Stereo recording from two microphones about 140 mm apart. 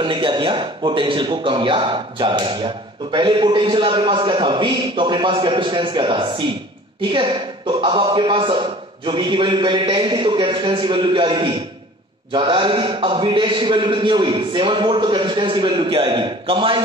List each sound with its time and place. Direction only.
0.0 s a man's voice: 35° right (ahead or behind)